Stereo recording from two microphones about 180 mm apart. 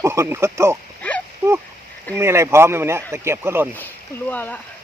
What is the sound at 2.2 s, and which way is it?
Speech, 15° right (ahead or behind).